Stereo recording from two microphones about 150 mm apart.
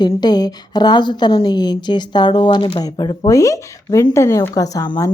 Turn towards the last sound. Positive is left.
turn(degrees=25)  # may be behind; listen again after turning